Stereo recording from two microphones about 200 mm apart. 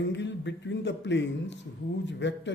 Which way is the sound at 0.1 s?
65° left (ahead or behind).